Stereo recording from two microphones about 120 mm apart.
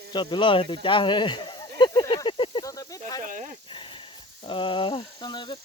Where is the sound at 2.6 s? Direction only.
30° left (ahead or behind).